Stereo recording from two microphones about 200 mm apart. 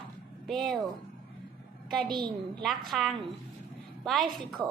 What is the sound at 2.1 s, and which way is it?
Speech, 20° right (ahead or behind).